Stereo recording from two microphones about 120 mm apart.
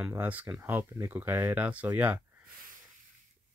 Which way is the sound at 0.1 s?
15° right (ahead or behind).